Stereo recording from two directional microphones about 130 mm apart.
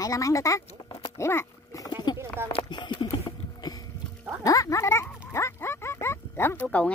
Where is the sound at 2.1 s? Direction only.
35° left (ahead or behind).